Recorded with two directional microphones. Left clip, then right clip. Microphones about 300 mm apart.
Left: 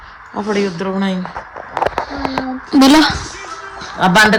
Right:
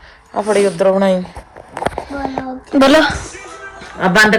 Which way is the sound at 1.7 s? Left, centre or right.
Right.